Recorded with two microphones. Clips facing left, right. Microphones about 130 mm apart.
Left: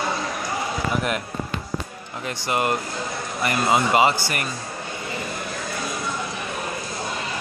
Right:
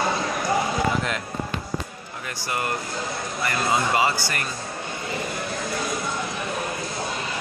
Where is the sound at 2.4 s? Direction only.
20° left (ahead or behind).